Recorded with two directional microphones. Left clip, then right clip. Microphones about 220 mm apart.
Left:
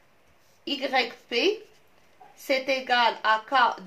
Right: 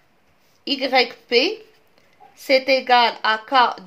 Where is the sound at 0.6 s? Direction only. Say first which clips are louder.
Right 7 dB; 50° right (ahead or behind).